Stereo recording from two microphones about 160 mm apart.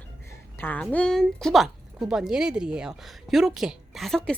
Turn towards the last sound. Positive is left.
turn(degrees=0)  # may be behind; listen again after turning